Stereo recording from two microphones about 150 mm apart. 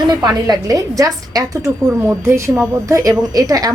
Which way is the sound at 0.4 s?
25° right (ahead or behind).